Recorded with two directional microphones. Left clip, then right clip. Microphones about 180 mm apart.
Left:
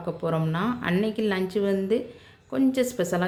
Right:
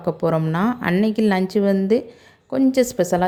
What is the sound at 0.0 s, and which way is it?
A woman's voice, 35° right (ahead or behind).